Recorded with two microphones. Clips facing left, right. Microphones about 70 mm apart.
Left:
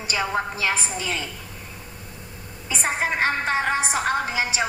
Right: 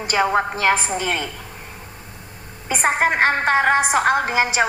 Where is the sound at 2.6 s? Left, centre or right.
Right.